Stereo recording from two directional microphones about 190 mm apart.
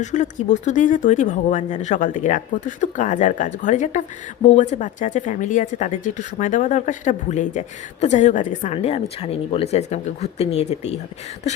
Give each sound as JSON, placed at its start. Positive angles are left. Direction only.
{"t": 0.0, "sound": "speech", "side_deg": 40}